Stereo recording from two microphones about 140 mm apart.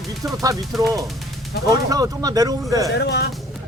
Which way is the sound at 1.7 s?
25° right (ahead or behind).